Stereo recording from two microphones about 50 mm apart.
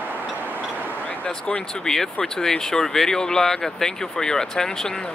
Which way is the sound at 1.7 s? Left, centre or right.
Centre.